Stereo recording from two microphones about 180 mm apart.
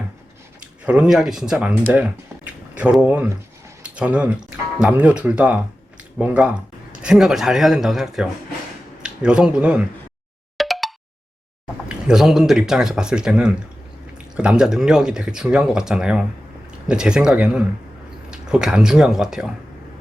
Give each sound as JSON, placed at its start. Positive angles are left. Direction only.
{"t": 0.9, "sound": "speech", "side_deg": -5}
{"t": 10.6, "sound": "plop", "side_deg": 0}
{"t": 11.9, "sound": "speech", "side_deg": -5}